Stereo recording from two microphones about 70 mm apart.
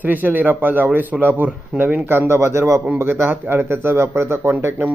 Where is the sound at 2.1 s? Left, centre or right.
Right.